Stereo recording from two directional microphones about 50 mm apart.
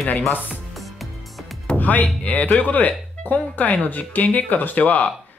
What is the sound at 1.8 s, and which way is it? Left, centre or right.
Speech, left.